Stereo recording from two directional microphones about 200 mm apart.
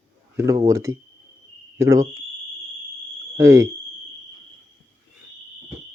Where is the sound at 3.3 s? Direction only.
15° right (ahead or behind).